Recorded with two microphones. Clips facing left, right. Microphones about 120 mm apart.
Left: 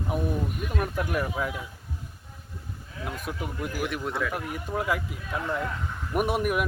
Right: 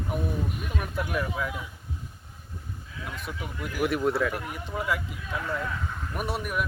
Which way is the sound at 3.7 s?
Centre (ahead or behind).